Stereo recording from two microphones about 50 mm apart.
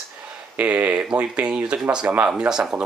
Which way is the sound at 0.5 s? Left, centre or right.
Right.